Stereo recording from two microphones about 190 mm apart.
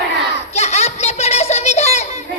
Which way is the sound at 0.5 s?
35° left (ahead or behind).